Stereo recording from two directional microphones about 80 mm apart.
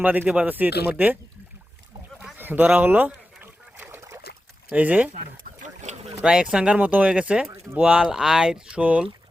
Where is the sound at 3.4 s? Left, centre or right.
Right.